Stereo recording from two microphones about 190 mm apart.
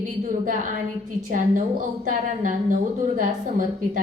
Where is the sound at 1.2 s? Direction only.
45° right (ahead or behind).